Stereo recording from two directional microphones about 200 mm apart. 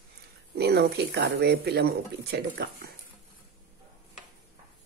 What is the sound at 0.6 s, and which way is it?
Speech, 55° right (ahead or behind).